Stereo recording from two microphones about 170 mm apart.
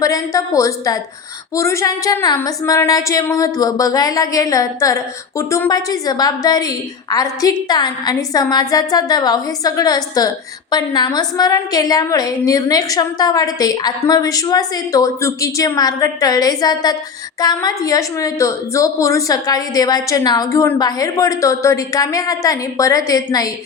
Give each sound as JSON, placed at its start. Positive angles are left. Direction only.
{"t": 0.0, "sound": "a woman's voice", "side_deg": 20}